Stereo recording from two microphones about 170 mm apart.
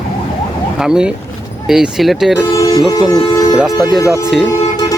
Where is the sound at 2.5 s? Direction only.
20° left (ahead or behind).